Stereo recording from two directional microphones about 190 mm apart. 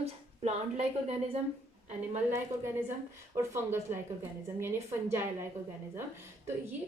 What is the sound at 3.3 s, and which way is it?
Speech, 15° right (ahead or behind).